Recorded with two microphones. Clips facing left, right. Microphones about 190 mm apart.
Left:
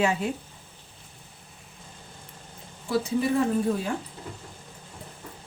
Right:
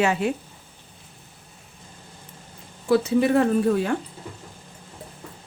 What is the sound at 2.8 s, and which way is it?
Speech, 70° right (ahead or behind).